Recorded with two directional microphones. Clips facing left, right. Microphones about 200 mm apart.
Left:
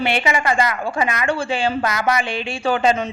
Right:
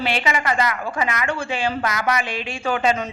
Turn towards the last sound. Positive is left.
turn(degrees=35)  # may be behind; listen again after turning